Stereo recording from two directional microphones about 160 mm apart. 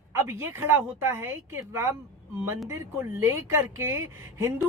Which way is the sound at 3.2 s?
15° right (ahead or behind).